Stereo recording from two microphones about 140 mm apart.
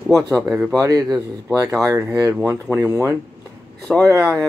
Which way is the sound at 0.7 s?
25° right (ahead or behind).